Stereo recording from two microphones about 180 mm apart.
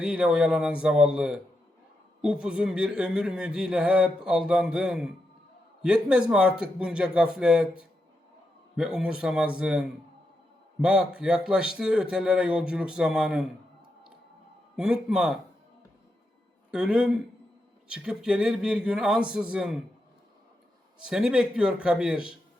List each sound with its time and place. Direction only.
0.0 s speech: 5° right (ahead or behind)
8.7 s speech: 5° right (ahead or behind)
14.8 s speech: 5° right (ahead or behind)
16.7 s speech: 5° right (ahead or behind)
21.0 s speech: 5° right (ahead or behind)